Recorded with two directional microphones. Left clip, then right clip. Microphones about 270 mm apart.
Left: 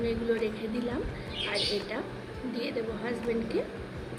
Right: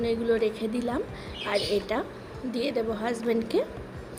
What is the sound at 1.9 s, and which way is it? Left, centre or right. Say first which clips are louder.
A woman's voice: right 5 dB; right.